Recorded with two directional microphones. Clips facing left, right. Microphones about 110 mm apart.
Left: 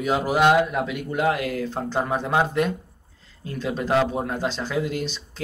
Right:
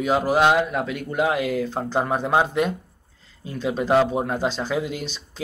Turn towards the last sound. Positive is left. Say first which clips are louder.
# even
turn(degrees=0)  # may be behind; listen again after turning